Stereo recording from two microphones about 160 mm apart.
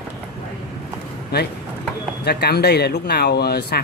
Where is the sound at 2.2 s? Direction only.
90° left.